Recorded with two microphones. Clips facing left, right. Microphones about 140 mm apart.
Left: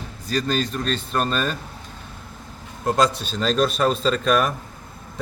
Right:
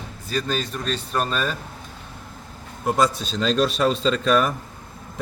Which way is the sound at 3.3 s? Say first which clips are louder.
Even; 5° left (ahead or behind).